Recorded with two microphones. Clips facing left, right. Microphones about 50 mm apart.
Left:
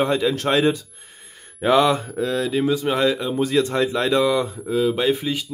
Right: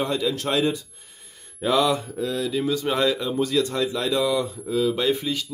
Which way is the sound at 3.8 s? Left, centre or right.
Left.